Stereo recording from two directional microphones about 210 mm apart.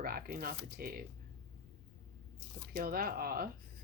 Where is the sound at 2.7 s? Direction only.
45° right (ahead or behind).